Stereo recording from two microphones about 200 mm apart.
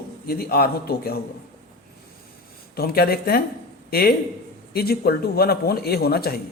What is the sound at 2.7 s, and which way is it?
A man's voice, 50° left (ahead or behind).